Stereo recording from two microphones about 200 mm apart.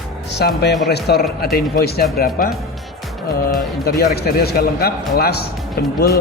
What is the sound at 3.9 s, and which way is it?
Speech, 50° left (ahead or behind).